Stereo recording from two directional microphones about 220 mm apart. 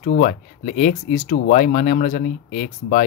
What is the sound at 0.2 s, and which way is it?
Speech, 35° left (ahead or behind).